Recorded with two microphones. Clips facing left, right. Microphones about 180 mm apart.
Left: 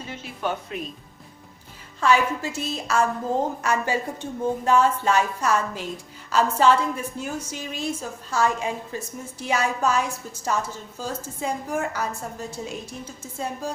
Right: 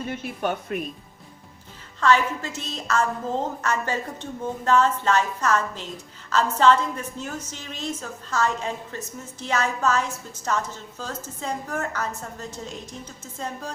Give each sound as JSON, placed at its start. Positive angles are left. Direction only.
{"t": 0.0, "sound": "speech", "side_deg": -55}
{"t": 2.0, "sound": "a woman's voice", "side_deg": 10}